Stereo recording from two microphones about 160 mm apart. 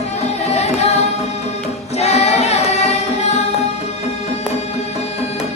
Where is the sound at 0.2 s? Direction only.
40° left (ahead or behind).